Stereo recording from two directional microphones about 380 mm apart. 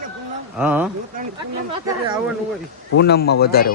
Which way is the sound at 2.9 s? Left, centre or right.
Left.